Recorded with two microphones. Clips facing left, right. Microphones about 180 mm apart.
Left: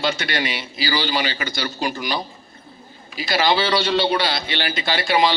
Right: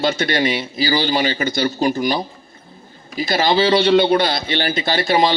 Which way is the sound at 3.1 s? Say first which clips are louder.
Right 2 dB; 45° right (ahead or behind).